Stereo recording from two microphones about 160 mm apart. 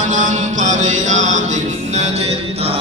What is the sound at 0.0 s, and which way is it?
Music, 50° right (ahead or behind).